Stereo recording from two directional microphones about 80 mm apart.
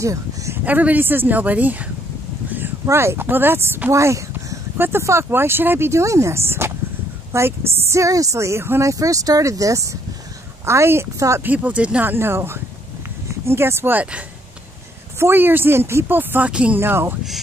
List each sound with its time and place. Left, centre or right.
0.0 s speech: right
0.7 s speech: right
2.9 s speech: right
3.9 s a sound: right
4.8 s speech: right
8.9 s speech: right
11.4 s speech: centre
15.1 s speech: right
16.8 s speech: right